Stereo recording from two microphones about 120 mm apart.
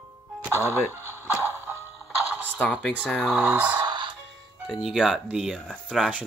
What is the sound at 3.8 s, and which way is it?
Music, 35° right (ahead or behind).